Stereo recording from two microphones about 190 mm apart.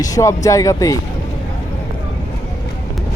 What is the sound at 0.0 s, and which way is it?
Speech, 15° left (ahead or behind).